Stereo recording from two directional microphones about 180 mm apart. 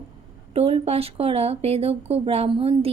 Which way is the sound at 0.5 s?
35° right (ahead or behind).